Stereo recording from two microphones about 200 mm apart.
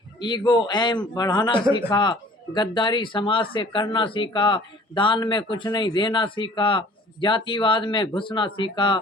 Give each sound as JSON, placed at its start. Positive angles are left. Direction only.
{"t": 0.2, "sound": "speech", "side_deg": 20}